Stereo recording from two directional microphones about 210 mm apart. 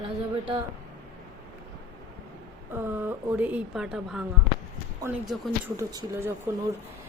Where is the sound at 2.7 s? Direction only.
10° right (ahead or behind).